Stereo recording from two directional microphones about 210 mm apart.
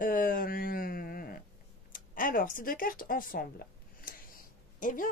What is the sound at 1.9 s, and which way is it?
Speech, 40° left (ahead or behind).